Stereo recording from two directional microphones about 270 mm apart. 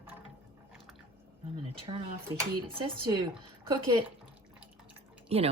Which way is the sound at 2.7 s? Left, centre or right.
Centre.